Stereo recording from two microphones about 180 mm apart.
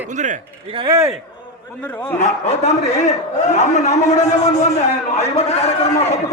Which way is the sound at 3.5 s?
40° left (ahead or behind).